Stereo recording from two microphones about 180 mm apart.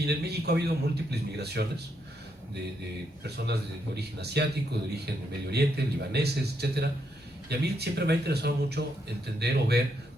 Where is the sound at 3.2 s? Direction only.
65° right (ahead or behind).